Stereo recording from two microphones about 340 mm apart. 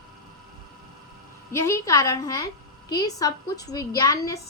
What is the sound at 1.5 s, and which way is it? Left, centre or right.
A woman's voice, centre.